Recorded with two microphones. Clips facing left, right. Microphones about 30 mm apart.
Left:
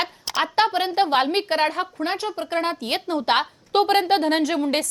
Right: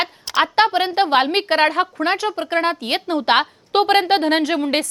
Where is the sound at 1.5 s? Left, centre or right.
Right.